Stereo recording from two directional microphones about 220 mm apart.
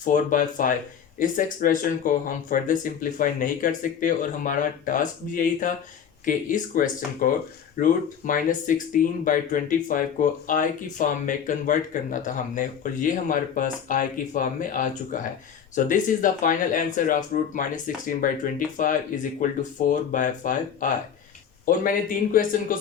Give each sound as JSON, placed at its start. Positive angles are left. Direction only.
{"t": 0.0, "sound": "speech", "side_deg": 35}
{"t": 19.4, "sound": "speech", "side_deg": 35}